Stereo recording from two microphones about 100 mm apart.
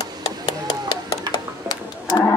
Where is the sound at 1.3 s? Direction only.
45° left (ahead or behind).